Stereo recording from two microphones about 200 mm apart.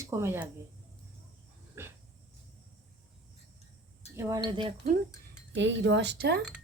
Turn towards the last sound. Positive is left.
turn(degrees=-55)  # may be behind; listen again after turning